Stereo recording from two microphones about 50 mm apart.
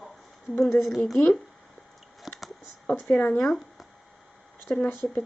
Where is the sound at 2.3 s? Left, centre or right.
Centre.